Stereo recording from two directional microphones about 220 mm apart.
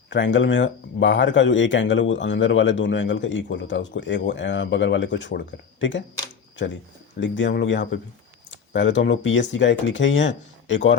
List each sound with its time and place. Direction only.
0.1 s speech: 55° left (ahead or behind)